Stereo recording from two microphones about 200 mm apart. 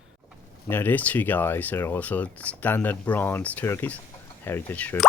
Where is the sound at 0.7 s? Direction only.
10° left (ahead or behind).